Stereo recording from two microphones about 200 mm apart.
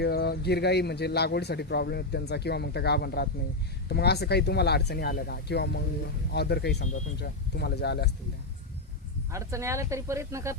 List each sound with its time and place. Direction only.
0.0 s a man's voice: 50° left (ahead or behind)
9.3 s speech: 15° right (ahead or behind)